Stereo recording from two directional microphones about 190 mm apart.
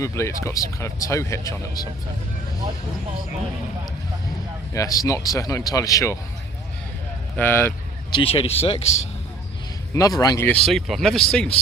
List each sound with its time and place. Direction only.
0.0 s speech: 15° left (ahead or behind)
4.7 s speech: 20° left (ahead or behind)
7.3 s speech: 10° left (ahead or behind)
8.1 s speech: 30° left (ahead or behind)
9.9 s speech: 20° left (ahead or behind)